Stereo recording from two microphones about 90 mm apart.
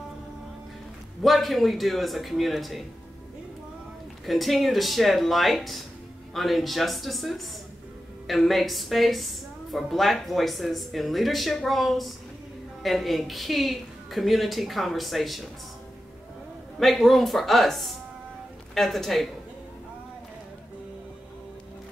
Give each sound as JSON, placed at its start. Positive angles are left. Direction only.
{"t": 1.2, "sound": "a woman's voice", "side_deg": 0}
{"t": 4.3, "sound": "a woman's voice", "side_deg": 0}
{"t": 16.8, "sound": "a woman's voice", "side_deg": 0}